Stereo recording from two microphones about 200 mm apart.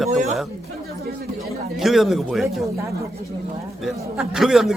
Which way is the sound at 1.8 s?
Centre (ahead or behind).